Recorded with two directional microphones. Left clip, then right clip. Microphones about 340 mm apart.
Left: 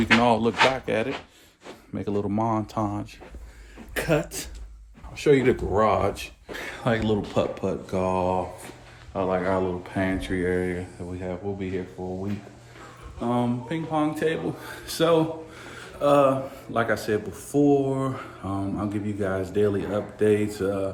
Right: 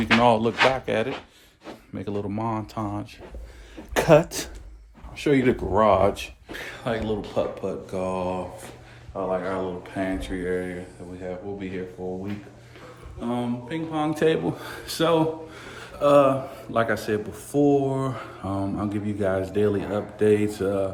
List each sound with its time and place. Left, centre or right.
0.0 s speech: centre
3.9 s speech: centre
5.1 s speech: centre
6.5 s speech: centre
13.2 s speech: centre
14.1 s speech: centre